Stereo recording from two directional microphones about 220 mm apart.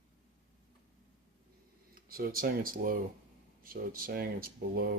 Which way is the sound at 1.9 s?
40° right (ahead or behind).